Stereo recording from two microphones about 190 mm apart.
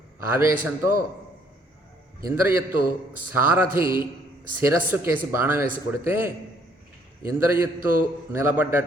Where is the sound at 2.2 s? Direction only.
10° right (ahead or behind).